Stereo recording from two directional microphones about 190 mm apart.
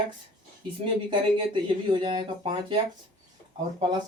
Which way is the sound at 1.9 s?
25° right (ahead or behind).